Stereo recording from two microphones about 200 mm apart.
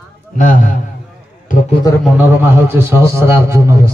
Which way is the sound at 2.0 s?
10° right (ahead or behind).